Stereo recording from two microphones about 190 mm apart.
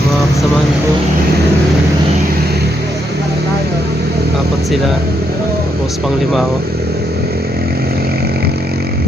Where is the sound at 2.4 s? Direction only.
60° right (ahead or behind).